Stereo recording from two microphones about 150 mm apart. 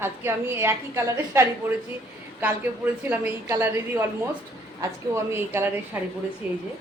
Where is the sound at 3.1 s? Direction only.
15° right (ahead or behind).